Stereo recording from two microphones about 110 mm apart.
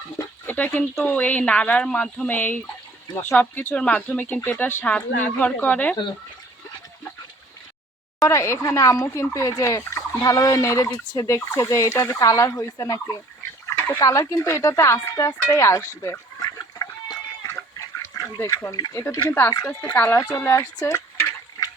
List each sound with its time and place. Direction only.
0.4 s speech: 15° left (ahead or behind)
8.2 s speech: 25° left (ahead or behind)
16.0 s chicken: 30° left (ahead or behind)
18.1 s speech: 25° left (ahead or behind)